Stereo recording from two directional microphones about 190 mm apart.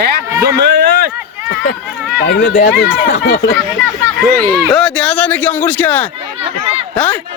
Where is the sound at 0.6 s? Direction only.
60° right (ahead or behind).